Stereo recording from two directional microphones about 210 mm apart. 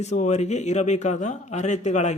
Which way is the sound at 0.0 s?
35° left (ahead or behind).